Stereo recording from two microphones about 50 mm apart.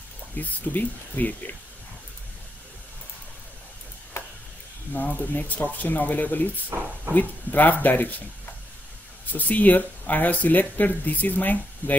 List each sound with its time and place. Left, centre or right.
0.4 s speech: left
4.9 s speech: left
9.2 s speech: left